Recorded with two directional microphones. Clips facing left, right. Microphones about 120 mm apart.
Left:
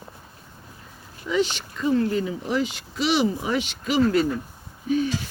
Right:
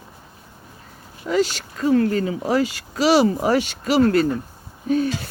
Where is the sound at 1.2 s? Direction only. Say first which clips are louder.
Right 4 dB; 25° right (ahead or behind).